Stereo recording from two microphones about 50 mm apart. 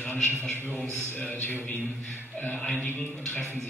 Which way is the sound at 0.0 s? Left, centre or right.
Left.